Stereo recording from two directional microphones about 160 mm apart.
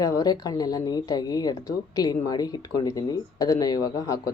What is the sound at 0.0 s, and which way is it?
Speech, 25° left (ahead or behind).